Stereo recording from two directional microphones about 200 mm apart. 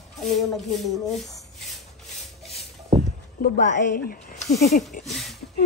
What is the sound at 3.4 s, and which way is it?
A woman's voice, 40° left (ahead or behind).